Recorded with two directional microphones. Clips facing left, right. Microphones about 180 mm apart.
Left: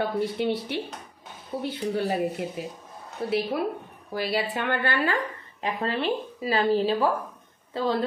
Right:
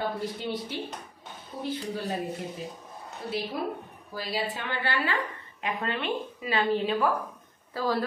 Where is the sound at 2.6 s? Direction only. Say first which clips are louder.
Left 3 dB; 70° left (ahead or behind); by 5.1 s 55° left (ahead or behind).